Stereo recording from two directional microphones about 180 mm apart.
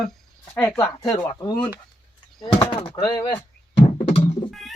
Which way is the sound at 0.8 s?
20° left (ahead or behind).